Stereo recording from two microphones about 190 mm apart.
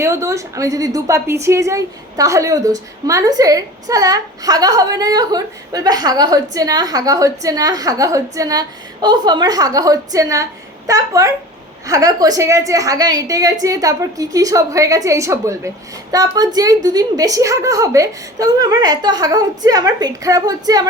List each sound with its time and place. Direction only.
0.0 s a woman's voice: 15° right (ahead or behind)